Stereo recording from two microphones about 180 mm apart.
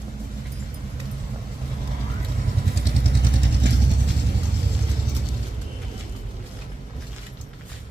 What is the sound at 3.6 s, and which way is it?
Vehicle, 80° right.